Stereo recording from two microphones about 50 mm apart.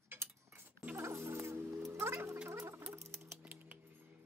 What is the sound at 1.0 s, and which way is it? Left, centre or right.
Music, right.